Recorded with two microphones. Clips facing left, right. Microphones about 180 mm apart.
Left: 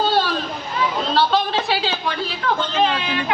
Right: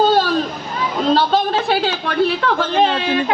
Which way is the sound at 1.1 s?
45° right (ahead or behind).